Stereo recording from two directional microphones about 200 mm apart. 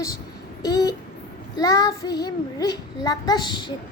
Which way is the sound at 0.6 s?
20° left (ahead or behind).